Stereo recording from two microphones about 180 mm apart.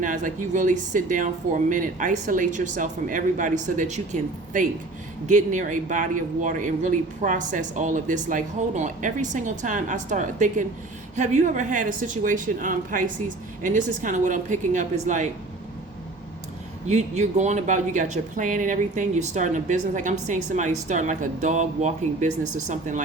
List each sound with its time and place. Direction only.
0.0 s speech: 45° right (ahead or behind)
16.8 s speech: 40° right (ahead or behind)